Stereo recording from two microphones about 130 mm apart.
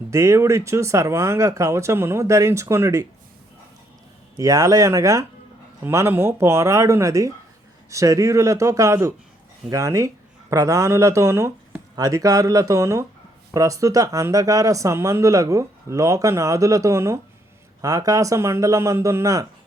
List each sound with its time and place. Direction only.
0.1 s speech: 25° right (ahead or behind)
4.4 s speech: 25° right (ahead or behind)